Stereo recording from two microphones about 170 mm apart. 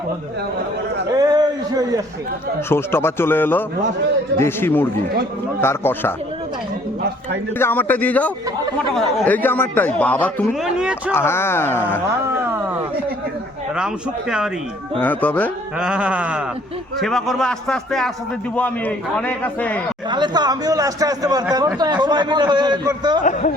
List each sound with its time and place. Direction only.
1.2 s a sound: 25° right (ahead or behind)
2.6 s speech: 15° left (ahead or behind)
7.6 s speech: 10° left (ahead or behind)
10.6 s speech: 5° right (ahead or behind)
11.1 s speech: 15° left (ahead or behind)
12.2 s a sound: 15° right (ahead or behind)
13.7 s speech: 5° right (ahead or behind)
15.0 s speech: 10° left (ahead or behind)
15.8 s sheep: 5° right (ahead or behind)
17.0 s speech: centre (ahead or behind)
20.1 s a man's voice: 25° right (ahead or behind)